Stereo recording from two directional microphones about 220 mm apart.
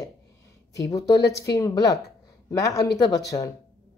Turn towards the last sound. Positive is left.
turn(degrees=15)  # may be behind; listen again after turning